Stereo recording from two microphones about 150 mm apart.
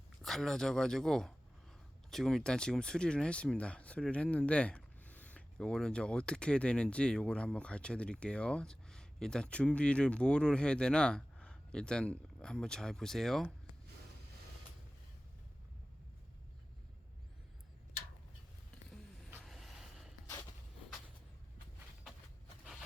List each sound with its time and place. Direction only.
0.2 s speech: centre (ahead or behind)
19.5 s vehicle: centre (ahead or behind)